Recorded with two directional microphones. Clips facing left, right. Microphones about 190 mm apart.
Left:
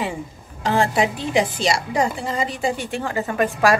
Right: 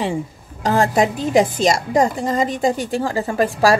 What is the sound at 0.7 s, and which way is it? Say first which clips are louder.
Speech: right 3 dB; 40° right (ahead or behind).